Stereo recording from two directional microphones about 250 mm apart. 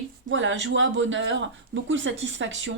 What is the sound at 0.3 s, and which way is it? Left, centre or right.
Speech, right.